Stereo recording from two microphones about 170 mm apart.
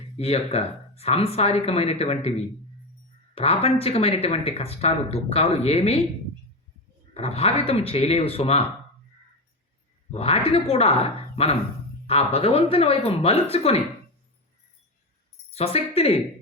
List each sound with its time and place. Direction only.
0.2 s speech: 35° left (ahead or behind)
3.3 s speech: 35° left (ahead or behind)
7.1 s speech: 35° left (ahead or behind)
10.1 s speech: 35° left (ahead or behind)
15.5 s speech: 35° left (ahead or behind)